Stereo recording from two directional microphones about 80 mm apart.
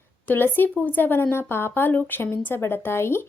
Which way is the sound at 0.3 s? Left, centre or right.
Left.